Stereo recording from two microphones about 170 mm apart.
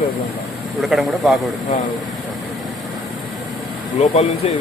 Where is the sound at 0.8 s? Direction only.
Centre (ahead or behind).